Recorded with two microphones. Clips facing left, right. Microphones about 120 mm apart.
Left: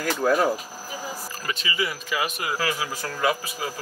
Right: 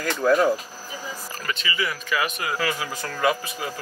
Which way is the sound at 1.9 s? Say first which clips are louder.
Right 2 dB; 15° left (ahead or behind).